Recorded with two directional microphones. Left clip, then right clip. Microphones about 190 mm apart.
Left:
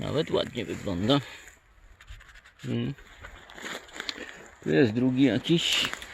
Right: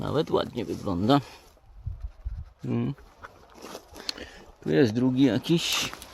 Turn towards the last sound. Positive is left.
turn(degrees=0)  # may be behind; listen again after turning